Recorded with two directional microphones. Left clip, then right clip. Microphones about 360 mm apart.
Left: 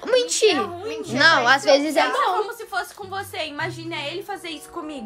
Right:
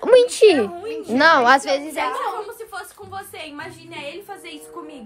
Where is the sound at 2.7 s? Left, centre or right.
Left.